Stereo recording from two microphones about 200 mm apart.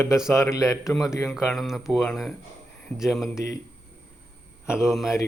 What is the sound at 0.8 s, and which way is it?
Speech, centre (ahead or behind).